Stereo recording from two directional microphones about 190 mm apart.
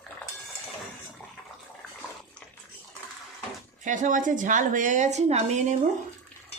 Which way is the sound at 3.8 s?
40° right (ahead or behind).